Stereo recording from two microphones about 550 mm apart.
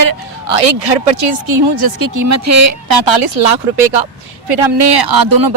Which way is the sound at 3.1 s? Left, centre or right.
Right.